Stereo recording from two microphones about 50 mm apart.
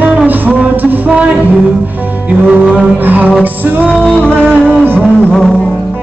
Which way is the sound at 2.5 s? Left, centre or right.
Centre.